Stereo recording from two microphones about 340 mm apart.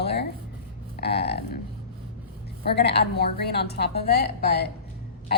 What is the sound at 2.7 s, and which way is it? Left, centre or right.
A woman's voice, left.